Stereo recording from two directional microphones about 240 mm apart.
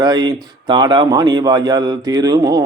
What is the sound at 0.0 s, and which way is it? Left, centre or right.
Speech, centre.